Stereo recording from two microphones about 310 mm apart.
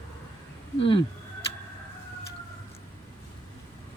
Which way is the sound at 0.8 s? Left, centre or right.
Centre.